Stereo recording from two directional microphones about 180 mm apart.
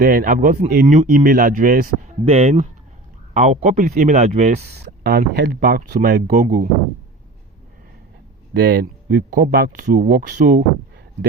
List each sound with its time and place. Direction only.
0.0 s speech: 55° right (ahead or behind)
5.0 s speech: 65° right (ahead or behind)
6.3 s speech: 40° right (ahead or behind)
8.6 s speech: 55° right (ahead or behind)